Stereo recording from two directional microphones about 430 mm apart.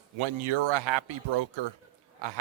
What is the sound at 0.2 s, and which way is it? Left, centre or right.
A man's voice, right.